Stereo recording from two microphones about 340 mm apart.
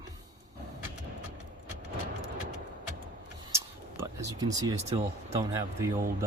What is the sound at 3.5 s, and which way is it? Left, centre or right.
Speech, centre.